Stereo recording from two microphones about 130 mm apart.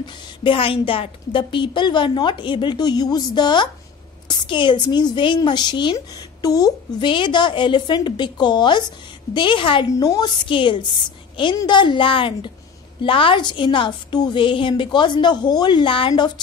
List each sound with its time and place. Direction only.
0.0 s a woman's voice: 40° left (ahead or behind)
9.9 s a woman's voice: 30° left (ahead or behind)
10.5 s a woman's voice: 40° left (ahead or behind)